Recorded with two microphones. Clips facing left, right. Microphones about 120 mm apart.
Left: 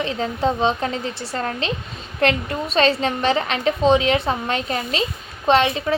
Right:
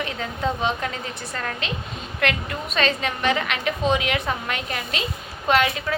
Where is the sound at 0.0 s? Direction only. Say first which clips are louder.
Left 5 dB; 30° left (ahead or behind).